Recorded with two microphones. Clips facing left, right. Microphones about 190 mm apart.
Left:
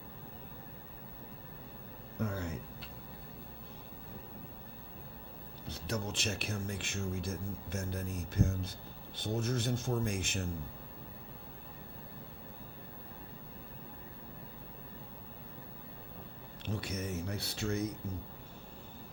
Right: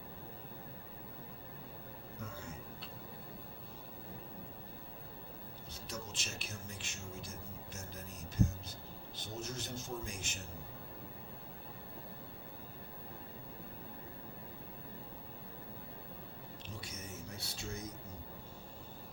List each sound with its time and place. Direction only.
2.1 s speech: 65° left (ahead or behind)
5.7 s speech: 60° left (ahead or behind)
16.6 s speech: 60° left (ahead or behind)